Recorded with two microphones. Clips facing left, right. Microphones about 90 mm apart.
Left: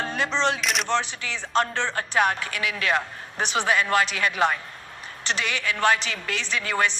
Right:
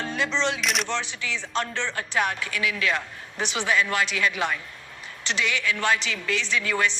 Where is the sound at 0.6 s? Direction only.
Centre (ahead or behind).